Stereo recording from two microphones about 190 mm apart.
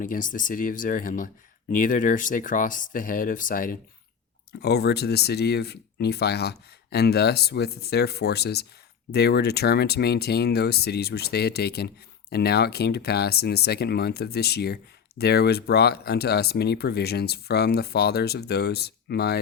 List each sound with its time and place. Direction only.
0.0 s speech: 45° left (ahead or behind)
4.6 s speech: 60° left (ahead or behind)